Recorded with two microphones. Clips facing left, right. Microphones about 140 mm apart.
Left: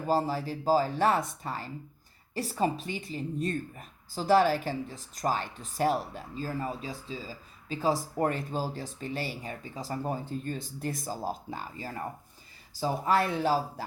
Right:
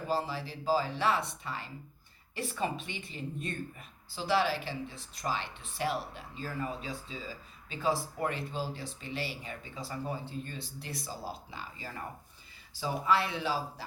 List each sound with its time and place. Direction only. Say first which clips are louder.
0.1 s speech: left 6 dB; 45° left (ahead or behind)